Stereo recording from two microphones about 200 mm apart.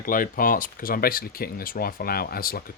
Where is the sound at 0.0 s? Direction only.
45° left (ahead or behind).